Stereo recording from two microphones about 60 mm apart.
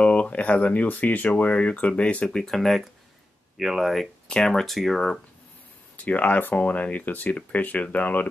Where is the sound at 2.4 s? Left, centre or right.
Centre.